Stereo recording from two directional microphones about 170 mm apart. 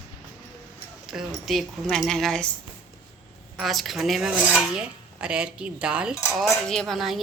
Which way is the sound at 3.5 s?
Centre (ahead or behind).